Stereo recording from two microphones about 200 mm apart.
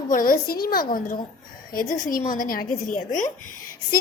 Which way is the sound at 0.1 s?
45° left (ahead or behind).